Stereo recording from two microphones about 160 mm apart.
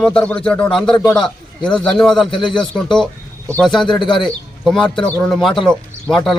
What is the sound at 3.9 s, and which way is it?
Speech, 30° left (ahead or behind).